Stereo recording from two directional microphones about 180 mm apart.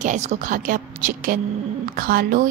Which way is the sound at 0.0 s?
40° right (ahead or behind).